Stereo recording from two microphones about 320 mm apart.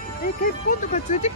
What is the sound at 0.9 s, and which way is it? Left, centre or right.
Speech, left.